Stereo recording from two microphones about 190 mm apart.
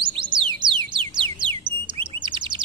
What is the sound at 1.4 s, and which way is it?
Bird, 25° right (ahead or behind).